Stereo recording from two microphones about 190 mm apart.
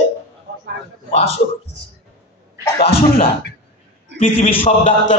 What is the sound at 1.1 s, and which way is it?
Speech, 30° left (ahead or behind).